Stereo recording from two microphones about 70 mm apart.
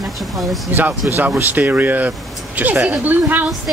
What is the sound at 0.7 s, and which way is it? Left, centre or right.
Speech, right.